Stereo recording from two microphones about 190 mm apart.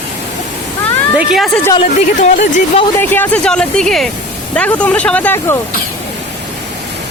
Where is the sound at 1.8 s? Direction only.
40° left (ahead or behind).